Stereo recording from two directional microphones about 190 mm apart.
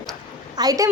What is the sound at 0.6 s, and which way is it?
Speech, 20° right (ahead or behind).